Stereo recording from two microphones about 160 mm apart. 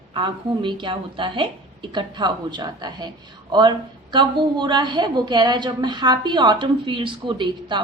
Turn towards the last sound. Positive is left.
turn(degrees=-30)  # may be behind; listen again after turning